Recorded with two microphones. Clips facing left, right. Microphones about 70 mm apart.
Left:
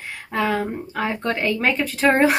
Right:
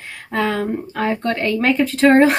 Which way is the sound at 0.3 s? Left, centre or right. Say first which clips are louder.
Right 2 dB; centre.